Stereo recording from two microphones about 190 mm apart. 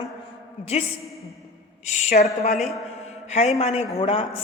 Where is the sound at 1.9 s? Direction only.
35° left (ahead or behind).